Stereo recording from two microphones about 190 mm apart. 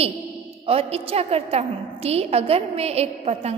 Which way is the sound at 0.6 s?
30° right (ahead or behind).